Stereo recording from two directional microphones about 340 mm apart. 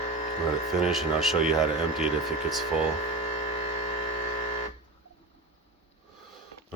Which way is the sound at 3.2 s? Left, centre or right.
Centre.